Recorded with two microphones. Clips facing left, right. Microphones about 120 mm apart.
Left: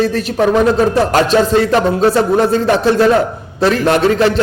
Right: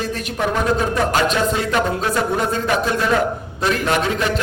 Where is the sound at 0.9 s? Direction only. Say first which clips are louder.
Left 7 dB; 35° left (ahead or behind).